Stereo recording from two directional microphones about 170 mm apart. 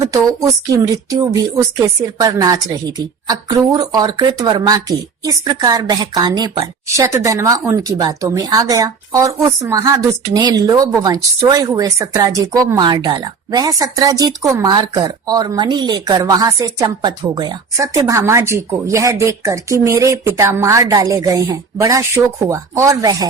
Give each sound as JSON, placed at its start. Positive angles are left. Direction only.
{"t": 1.8, "sound": "a woman's voice", "side_deg": -20}